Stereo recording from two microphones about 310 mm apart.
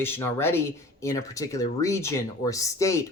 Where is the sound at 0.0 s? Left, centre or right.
Centre.